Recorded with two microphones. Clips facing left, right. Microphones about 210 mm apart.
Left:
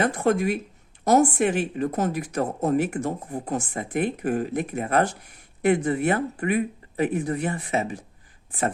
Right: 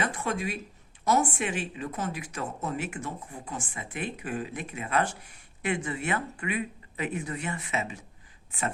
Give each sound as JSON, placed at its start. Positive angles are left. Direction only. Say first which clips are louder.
{"t": 0.0, "sound": "speech", "louder": "left 9 dB", "side_deg": 45}
{"t": 3.8, "sound": "speech", "louder": "left 10 dB", "side_deg": 55}
{"t": 7.4, "sound": "speech", "louder": "left 7 dB", "side_deg": 35}